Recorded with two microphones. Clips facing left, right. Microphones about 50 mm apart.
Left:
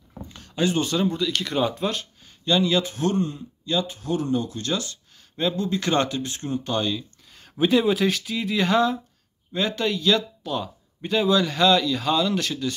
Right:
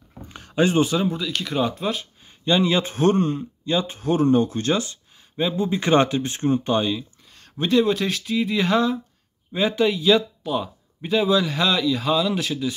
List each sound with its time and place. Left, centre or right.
0.3 s a sound: right
0.8 s speech: centre
2.4 s speech: right
3.6 s speech: right
5.3 s speech: centre
6.8 s speech: centre
7.3 s speech: centre
9.5 s speech: centre